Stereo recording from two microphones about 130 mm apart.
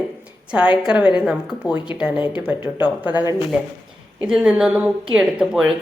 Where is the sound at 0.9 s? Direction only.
35° left (ahead or behind).